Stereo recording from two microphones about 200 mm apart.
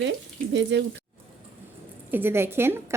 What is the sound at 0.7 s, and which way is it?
Speech, 60° right (ahead or behind).